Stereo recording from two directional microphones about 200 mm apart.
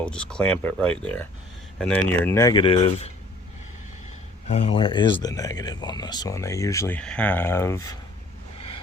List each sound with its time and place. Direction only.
0.0 s speech: 5° left (ahead or behind); by 3.1 s 25° left (ahead or behind)
4.4 s speech: 35° left (ahead or behind); by 7.8 s 15° left (ahead or behind)